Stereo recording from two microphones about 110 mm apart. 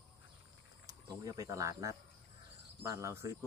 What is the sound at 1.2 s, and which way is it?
Speech, 35° right (ahead or behind).